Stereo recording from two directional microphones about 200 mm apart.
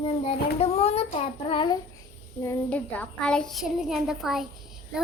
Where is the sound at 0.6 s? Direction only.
30° left (ahead or behind).